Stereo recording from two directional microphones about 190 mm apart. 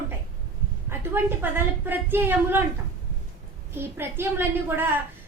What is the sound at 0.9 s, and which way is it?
A woman's voice, 10° right (ahead or behind).